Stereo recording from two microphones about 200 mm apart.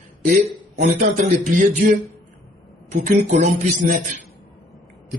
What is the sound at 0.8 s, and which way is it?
Speech, 40° right (ahead or behind).